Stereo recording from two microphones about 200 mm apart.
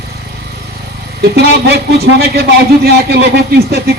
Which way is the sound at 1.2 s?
55° right (ahead or behind).